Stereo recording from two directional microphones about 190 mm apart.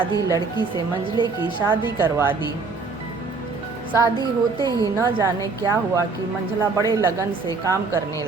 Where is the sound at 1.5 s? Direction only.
25° right (ahead or behind).